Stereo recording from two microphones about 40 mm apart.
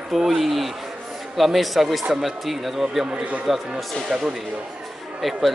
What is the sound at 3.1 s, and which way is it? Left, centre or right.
Speech, right.